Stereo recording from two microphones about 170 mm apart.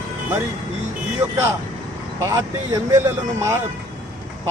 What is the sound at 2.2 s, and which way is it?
Speech, 20° right (ahead or behind).